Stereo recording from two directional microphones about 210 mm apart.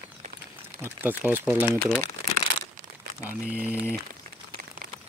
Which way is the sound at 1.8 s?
5° left (ahead or behind).